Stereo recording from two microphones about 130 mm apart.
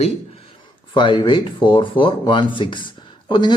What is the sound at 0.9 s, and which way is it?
Speech, 40° left (ahead or behind).